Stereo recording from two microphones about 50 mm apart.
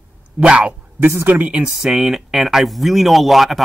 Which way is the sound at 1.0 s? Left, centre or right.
Right.